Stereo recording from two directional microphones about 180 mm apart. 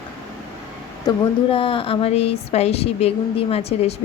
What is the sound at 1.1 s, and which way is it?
Speech, 30° left (ahead or behind).